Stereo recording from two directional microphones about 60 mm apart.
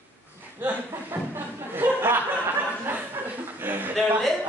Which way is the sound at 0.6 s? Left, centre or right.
Right.